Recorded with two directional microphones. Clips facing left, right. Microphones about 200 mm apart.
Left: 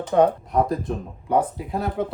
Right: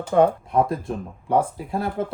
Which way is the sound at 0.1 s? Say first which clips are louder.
Even; centre (ahead or behind).